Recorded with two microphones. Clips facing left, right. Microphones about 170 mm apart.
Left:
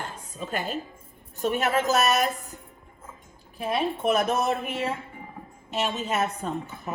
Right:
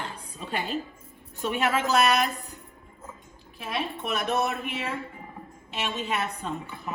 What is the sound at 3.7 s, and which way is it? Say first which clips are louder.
A woman's voice: left 6 dB; 40° left (ahead or behind).